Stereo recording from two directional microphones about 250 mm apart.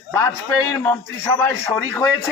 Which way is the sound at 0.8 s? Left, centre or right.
Centre.